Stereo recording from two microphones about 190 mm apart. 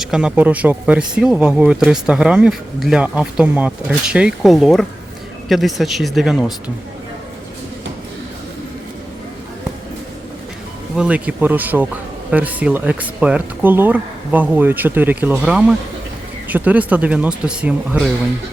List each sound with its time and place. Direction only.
0.0 s speech: 5° right (ahead or behind)
10.9 s speech: 5° right (ahead or behind)